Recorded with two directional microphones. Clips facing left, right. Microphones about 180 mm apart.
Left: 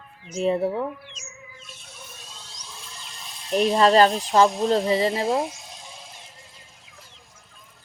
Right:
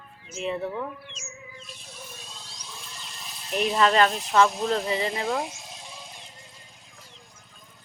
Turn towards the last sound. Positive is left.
turn(degrees=0)  # may be behind; listen again after turning